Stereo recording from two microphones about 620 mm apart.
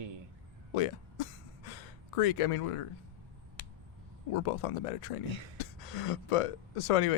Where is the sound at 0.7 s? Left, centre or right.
Left.